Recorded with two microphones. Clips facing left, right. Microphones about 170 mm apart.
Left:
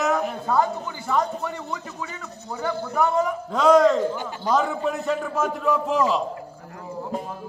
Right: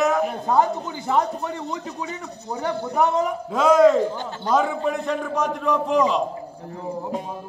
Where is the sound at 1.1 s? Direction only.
20° right (ahead or behind).